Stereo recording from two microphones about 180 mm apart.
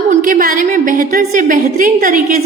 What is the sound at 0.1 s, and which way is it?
A woman's voice, 50° right (ahead or behind).